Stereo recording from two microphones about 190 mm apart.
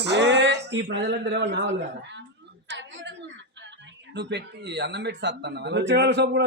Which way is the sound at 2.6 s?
70° right (ahead or behind).